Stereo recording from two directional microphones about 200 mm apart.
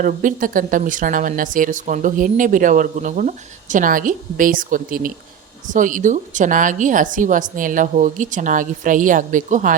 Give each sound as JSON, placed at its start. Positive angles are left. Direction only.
{"t": 0.0, "sound": "speech", "side_deg": -40}